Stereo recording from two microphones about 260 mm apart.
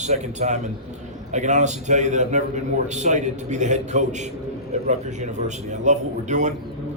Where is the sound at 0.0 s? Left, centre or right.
Right.